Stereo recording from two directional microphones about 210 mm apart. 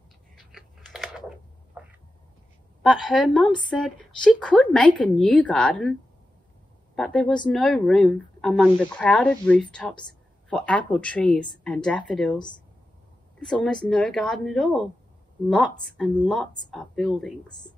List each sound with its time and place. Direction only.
0.4 s typing: centre (ahead or behind)
1.8 s a sound: 5° right (ahead or behind)
2.8 s a woman's voice: centre (ahead or behind)
7.0 s a woman's voice: 5° left (ahead or behind)
12.4 s speech: 20° left (ahead or behind)
13.4 s a woman's voice: 5° left (ahead or behind)